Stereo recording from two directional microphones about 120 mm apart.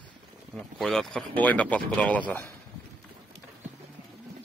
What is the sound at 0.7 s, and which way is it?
Speech, centre (ahead or behind).